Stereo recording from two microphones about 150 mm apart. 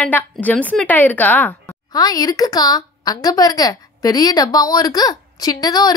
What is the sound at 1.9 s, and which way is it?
A woman's voice, 25° left (ahead or behind).